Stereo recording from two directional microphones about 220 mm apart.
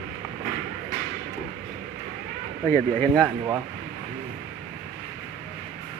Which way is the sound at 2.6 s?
10° left (ahead or behind).